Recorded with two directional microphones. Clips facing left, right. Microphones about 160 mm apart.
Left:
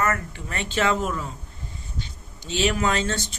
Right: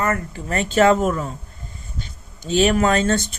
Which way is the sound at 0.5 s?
45° right (ahead or behind).